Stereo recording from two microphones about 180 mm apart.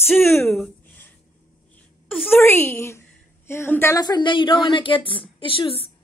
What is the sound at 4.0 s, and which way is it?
A woman's voice, 25° left (ahead or behind).